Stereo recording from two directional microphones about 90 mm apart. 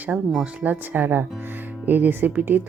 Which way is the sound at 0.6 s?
20° right (ahead or behind).